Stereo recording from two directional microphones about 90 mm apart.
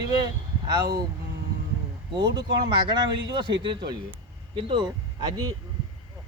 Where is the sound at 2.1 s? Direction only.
65° right (ahead or behind).